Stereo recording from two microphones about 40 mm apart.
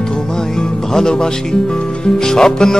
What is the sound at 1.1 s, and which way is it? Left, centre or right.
Mantra, centre.